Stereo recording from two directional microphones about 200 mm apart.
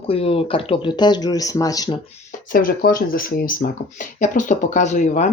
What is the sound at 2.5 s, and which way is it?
Speech, 45° left (ahead or behind).